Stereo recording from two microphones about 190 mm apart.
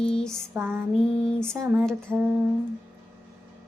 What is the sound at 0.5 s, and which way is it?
Female singing, 10° right (ahead or behind).